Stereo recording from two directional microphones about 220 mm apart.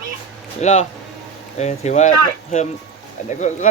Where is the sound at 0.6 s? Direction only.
30° left (ahead or behind).